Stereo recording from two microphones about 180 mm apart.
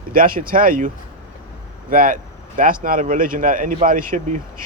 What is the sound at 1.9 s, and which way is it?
Speech, 50° right (ahead or behind).